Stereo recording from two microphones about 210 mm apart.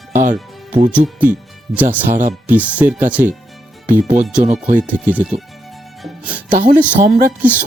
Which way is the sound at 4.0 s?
35° right (ahead or behind).